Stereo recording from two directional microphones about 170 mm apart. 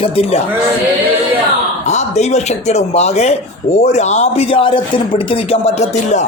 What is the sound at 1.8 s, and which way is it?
A man's voice, 40° left (ahead or behind).